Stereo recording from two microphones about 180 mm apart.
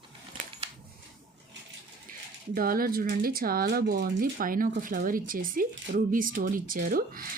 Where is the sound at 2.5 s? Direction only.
55° right (ahead or behind).